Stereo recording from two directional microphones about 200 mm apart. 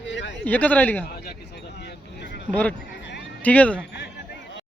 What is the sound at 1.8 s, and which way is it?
Vehicle, 55° left (ahead or behind).